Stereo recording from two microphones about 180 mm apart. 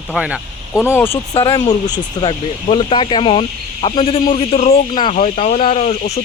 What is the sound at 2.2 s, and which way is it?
Speech, 30° left (ahead or behind).